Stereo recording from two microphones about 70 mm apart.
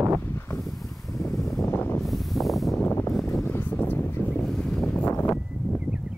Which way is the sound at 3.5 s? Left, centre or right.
Left.